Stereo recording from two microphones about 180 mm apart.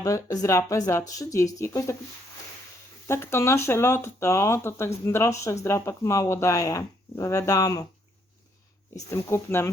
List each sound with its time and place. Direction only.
0.0 s speech: 20° left (ahead or behind)
3.1 s speech: 15° left (ahead or behind)
9.0 s speech: 15° left (ahead or behind)